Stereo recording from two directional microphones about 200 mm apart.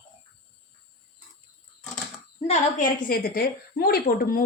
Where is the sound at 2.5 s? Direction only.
45° left (ahead or behind).